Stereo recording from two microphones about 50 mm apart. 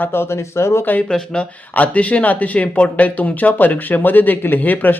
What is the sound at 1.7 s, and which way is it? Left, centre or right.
A man's voice, left.